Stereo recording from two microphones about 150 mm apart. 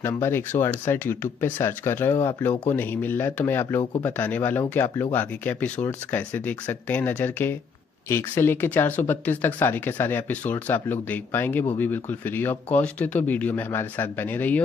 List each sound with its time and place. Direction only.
0.0 s speech: 15° left (ahead or behind)